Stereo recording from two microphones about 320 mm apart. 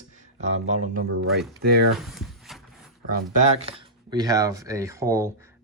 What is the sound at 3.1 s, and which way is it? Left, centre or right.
Speech, right.